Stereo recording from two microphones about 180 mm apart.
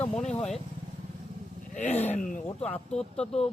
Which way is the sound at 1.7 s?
40° left (ahead or behind).